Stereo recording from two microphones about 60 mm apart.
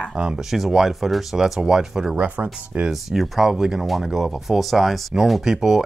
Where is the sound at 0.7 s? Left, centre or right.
Centre.